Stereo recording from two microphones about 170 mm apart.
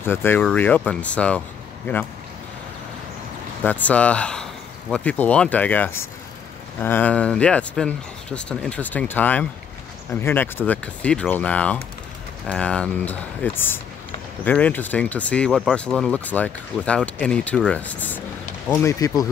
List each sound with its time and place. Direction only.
0.0 s speech: 15° left (ahead or behind)
3.6 s speech: 10° left (ahead or behind)